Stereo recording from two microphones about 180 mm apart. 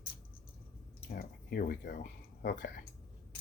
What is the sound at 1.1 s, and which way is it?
Speech, 55° left (ahead or behind).